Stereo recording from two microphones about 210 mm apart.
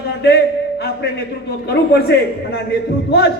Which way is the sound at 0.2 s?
50° left (ahead or behind).